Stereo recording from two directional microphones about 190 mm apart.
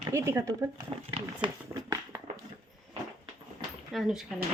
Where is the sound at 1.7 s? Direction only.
10° right (ahead or behind).